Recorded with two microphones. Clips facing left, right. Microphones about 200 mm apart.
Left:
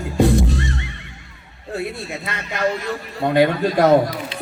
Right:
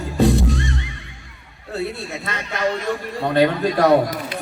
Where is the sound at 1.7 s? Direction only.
15° left (ahead or behind).